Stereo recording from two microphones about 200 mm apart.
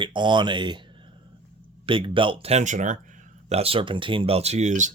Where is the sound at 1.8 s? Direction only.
25° right (ahead or behind).